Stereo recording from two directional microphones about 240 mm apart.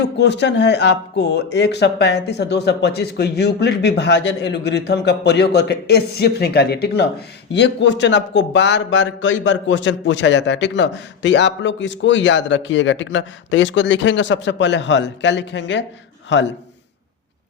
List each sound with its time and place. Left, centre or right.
0.0 s speech: left